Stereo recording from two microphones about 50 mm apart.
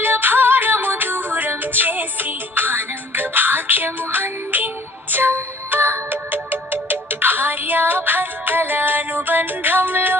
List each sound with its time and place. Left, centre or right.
0.0 s music: right